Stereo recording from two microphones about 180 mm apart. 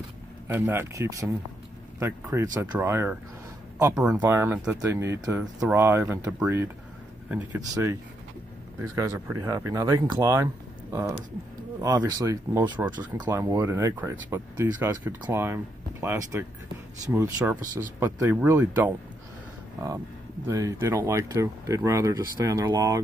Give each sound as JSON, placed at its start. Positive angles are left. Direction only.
{"t": 0.5, "sound": "speech", "side_deg": -15}
{"t": 7.7, "sound": "speech", "side_deg": -20}
{"t": 20.4, "sound": "speech", "side_deg": -20}